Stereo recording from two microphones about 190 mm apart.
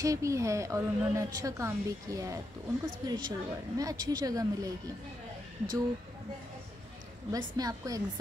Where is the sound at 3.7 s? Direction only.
20° right (ahead or behind).